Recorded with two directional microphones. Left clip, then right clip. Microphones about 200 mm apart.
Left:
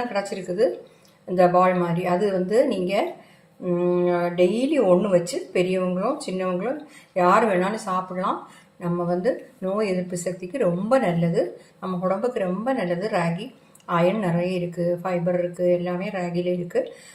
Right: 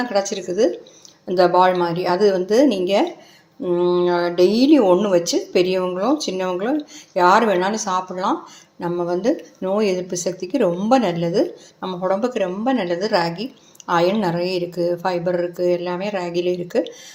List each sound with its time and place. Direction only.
0.1 s speech: 40° right (ahead or behind)